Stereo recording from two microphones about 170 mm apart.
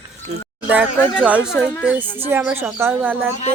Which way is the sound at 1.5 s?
10° left (ahead or behind).